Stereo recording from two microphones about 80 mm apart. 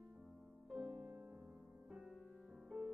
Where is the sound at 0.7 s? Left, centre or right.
Centre.